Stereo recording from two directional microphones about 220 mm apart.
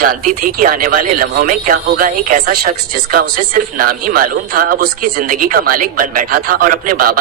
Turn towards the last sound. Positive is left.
turn(degrees=-40)  # may be behind; listen again after turning